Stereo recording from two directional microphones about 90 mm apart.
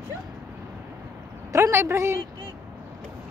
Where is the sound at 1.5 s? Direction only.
30° right (ahead or behind).